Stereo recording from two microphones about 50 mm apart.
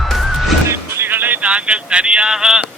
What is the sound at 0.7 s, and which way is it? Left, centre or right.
Music, right.